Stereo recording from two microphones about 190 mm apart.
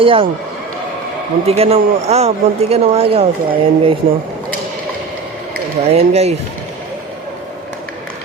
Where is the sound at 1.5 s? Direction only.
30° right (ahead or behind).